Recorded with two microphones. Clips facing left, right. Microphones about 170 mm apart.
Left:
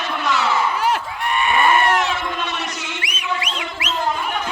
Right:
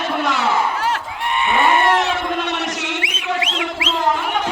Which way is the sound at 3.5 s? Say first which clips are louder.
Right 4 dB; 85° right.